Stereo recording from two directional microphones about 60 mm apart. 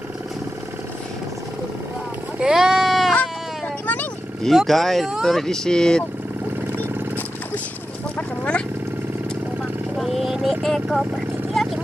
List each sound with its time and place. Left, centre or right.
2.4 s sheep: centre
3.8 s vehicle: left
4.6 s speech: centre
8.2 s a sound: centre
9.9 s vehicle: centre